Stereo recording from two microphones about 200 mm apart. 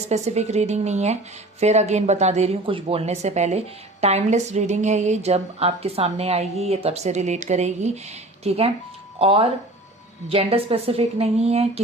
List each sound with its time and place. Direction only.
0.1 s a woman's voice: 35° right (ahead or behind)